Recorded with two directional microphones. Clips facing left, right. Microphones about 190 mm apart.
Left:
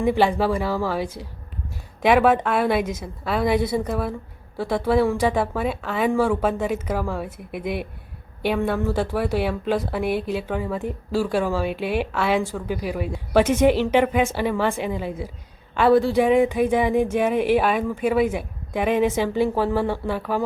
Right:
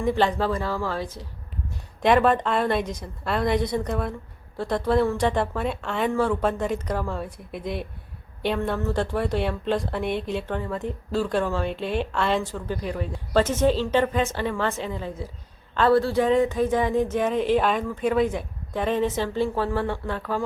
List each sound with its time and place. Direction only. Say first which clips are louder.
0.0 s a woman's voice: left 3 dB; 10° left (ahead or behind)
7.5 s speech: left 4 dB; 60° left (ahead or behind)
8.4 s a woman's voice: left 3 dB; 5° left (ahead or behind)